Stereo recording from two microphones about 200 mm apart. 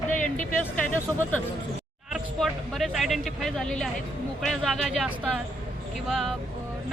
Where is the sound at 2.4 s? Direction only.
Centre (ahead or behind).